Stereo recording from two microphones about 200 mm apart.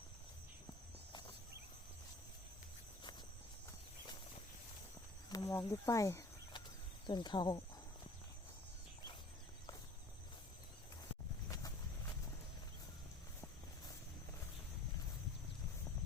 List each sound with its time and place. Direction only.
5.3 s cricket: 15° left (ahead or behind)
7.1 s speech: 20° left (ahead or behind)